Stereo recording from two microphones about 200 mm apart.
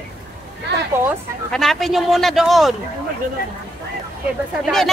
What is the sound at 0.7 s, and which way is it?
Speech, 60° right (ahead or behind).